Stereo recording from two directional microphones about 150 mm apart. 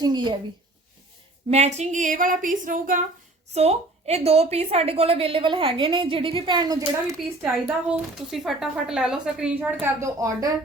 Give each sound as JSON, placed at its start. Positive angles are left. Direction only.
{"t": 0.0, "sound": "a woman's voice", "side_deg": -30}
{"t": 1.5, "sound": "a sound", "side_deg": -45}
{"t": 3.5, "sound": "a woman's voice", "side_deg": -45}
{"t": 7.9, "sound": "speech", "side_deg": 0}
{"t": 9.8, "sound": "a woman's voice", "side_deg": -20}